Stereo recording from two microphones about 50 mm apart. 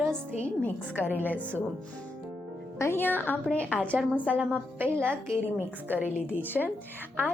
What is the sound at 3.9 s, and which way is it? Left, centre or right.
Speech, right.